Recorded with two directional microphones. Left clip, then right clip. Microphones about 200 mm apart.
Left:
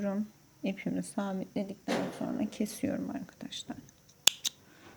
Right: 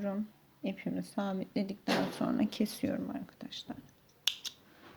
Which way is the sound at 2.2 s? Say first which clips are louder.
Right 2 dB; 30° right (ahead or behind).